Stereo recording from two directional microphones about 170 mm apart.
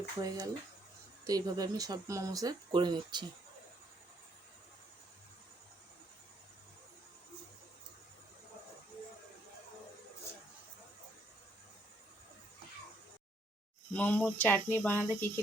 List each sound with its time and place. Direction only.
0.2 s speech: 20° right (ahead or behind)
13.9 s speech: 5° left (ahead or behind)